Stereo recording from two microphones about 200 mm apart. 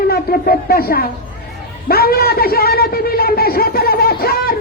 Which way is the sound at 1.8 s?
50° left (ahead or behind).